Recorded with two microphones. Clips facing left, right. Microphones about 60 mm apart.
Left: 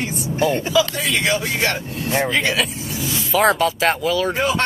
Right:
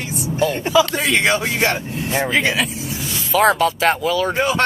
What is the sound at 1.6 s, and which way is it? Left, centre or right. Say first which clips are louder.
Speech: right 2 dB; centre.